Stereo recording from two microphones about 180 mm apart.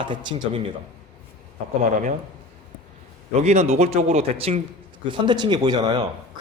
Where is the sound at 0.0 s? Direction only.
25° right (ahead or behind).